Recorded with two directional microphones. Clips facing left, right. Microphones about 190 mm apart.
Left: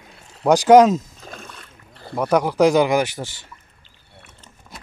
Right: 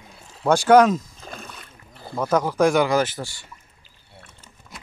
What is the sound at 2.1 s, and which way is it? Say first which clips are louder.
Speech: left 3 dB; 15° left (ahead or behind).